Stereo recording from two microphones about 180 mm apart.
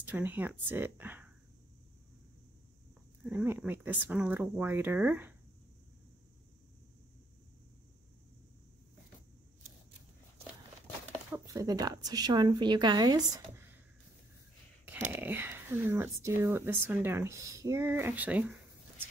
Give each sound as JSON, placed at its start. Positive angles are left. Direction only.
{"t": 0.0, "sound": "speech", "side_deg": -10}
{"t": 3.3, "sound": "speech", "side_deg": -10}
{"t": 11.3, "sound": "a woman's voice", "side_deg": -20}
{"t": 15.0, "sound": "speech", "side_deg": -10}